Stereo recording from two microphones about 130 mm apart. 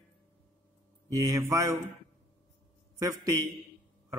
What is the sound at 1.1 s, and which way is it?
Speech, 25° right (ahead or behind).